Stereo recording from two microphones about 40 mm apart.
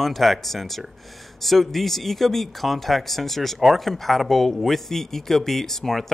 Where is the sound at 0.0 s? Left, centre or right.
Centre.